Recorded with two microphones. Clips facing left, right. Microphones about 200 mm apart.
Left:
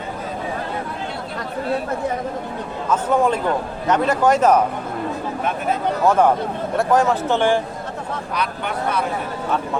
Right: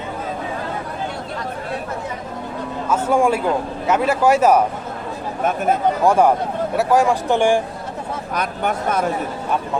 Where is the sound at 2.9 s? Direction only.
10° right (ahead or behind).